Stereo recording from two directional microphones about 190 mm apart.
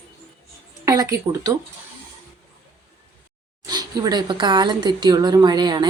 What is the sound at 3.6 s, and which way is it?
Speech, 20° right (ahead or behind).